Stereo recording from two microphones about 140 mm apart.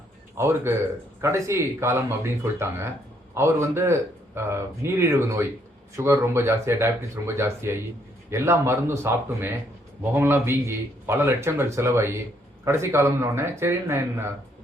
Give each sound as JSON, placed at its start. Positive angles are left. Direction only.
{"t": 0.3, "sound": "a man's voice", "side_deg": -15}